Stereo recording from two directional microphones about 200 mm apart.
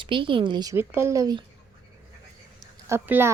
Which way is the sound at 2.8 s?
10° right (ahead or behind).